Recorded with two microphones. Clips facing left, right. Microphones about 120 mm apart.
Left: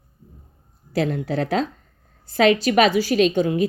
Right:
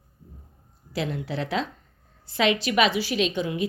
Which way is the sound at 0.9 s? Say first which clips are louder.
Left 7 dB; 45° left (ahead or behind).